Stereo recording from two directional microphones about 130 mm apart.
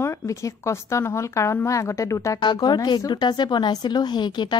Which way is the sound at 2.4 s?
35° left (ahead or behind).